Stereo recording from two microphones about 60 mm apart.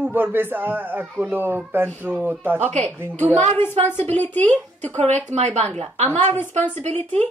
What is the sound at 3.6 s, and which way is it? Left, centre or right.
Speech, left.